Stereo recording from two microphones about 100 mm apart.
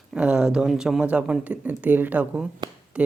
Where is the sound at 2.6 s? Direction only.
45° right (ahead or behind).